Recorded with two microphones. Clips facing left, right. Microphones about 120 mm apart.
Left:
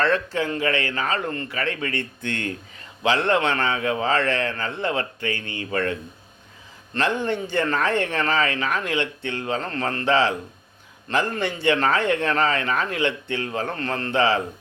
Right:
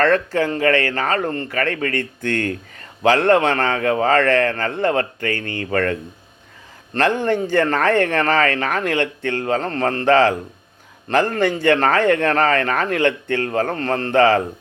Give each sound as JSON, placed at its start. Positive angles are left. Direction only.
{"t": 0.0, "sound": "a man's voice", "side_deg": -50}